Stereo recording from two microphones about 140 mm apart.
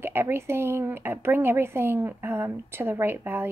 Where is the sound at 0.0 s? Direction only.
15° right (ahead or behind).